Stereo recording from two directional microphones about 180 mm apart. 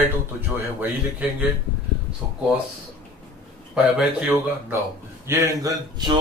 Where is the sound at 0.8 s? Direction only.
10° right (ahead or behind).